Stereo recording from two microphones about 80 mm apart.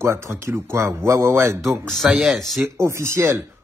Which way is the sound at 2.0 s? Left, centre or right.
Centre.